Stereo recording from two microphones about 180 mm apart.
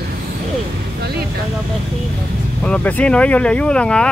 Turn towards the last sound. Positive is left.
turn(degrees=5)  # may be behind; listen again after turning